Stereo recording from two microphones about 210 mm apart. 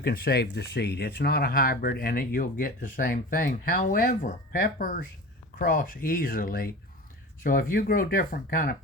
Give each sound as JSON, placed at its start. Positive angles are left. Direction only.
{"t": 0.0, "sound": "speech", "side_deg": 45}